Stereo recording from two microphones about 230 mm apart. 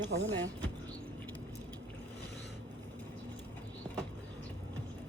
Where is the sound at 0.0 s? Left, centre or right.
Right.